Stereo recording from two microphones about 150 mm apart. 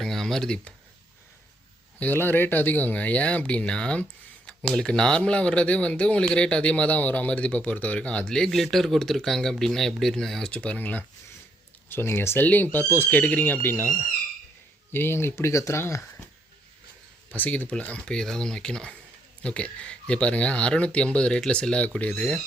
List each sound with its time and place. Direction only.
0.0 s a sound: 5° left (ahead or behind)
2.0 s speech: 15° left (ahead or behind)
17.3 s speech: 10° left (ahead or behind)